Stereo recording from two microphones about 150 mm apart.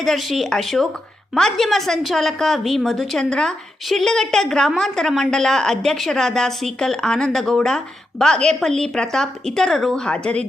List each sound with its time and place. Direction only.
0.0 s a woman's voice: centre (ahead or behind)